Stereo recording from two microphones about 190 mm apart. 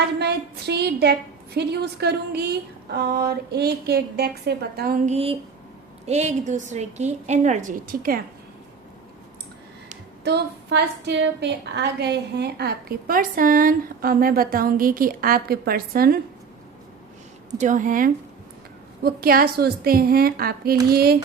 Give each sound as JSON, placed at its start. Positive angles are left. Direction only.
{"t": 0.0, "sound": "a woman's voice", "side_deg": -60}
{"t": 10.2, "sound": "a woman's voice", "side_deg": -60}
{"t": 17.5, "sound": "a woman's voice", "side_deg": -40}